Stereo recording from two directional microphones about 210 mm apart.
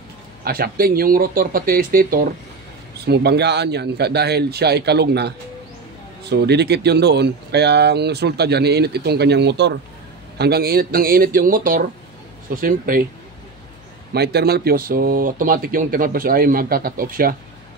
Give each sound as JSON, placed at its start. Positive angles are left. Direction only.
{"t": 0.4, "sound": "speech", "side_deg": -45}
{"t": 14.1, "sound": "speech", "side_deg": -50}